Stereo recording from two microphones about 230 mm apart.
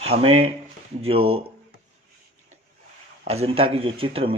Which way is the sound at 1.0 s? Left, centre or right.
Right.